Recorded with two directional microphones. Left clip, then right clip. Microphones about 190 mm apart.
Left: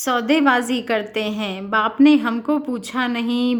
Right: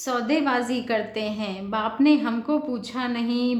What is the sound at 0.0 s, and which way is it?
A woman's voice, 35° left (ahead or behind).